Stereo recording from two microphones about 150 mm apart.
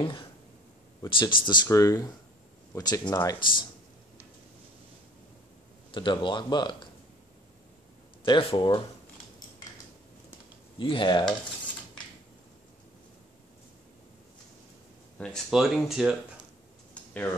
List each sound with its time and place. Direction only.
1.0 s speech: 30° left (ahead or behind)
5.9 s speech: 30° left (ahead or behind)
8.2 s speech: 35° left (ahead or behind)
10.8 s speech: 30° left (ahead or behind)
15.1 s speech: 5° left (ahead or behind)
16.9 s a sound: 10° left (ahead or behind)